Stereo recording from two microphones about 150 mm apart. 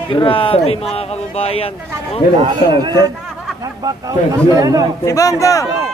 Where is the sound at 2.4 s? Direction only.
35° right (ahead or behind).